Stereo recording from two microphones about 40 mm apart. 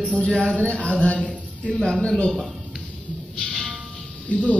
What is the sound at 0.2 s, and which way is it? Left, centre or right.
Speech, left.